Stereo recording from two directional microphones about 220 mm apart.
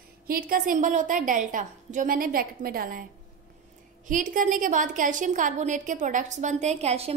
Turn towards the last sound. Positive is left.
turn(degrees=-30)  # may be behind; listen again after turning